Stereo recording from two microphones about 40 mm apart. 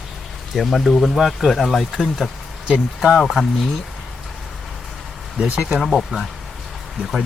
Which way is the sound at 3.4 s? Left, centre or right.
Centre.